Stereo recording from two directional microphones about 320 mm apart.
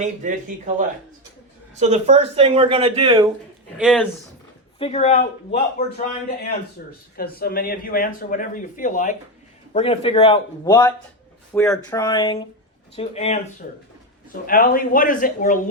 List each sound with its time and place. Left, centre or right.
0.0 s speech: right
3.8 s speech: centre
4.8 s speech: centre
6.8 s speech: left